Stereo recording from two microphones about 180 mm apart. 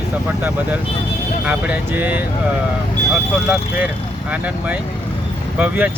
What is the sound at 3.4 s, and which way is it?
Speech, centre (ahead or behind).